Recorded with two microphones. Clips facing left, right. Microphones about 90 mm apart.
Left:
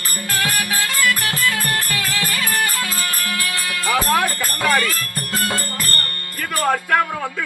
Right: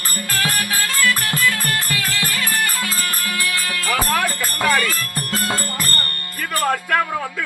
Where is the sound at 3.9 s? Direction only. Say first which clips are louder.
Left 2 dB; 10° left (ahead or behind).